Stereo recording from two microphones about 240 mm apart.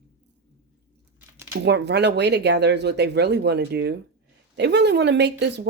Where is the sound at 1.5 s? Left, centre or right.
Right.